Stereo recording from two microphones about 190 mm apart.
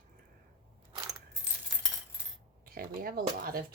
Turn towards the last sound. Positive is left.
turn(degrees=-50)  # may be behind; listen again after turning